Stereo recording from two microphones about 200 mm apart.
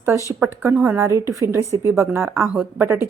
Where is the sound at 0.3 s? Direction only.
10° right (ahead or behind).